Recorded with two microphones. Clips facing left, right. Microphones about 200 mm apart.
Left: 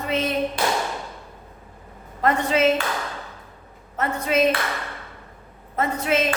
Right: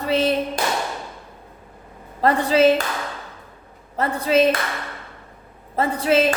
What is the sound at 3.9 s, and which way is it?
Speech, 30° right (ahead or behind).